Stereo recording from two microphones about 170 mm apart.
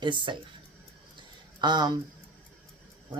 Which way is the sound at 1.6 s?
25° right (ahead or behind).